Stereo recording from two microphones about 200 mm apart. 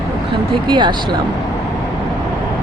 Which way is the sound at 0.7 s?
20° right (ahead or behind).